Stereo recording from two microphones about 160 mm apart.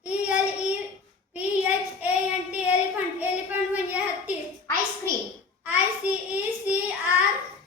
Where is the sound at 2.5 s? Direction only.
10° right (ahead or behind).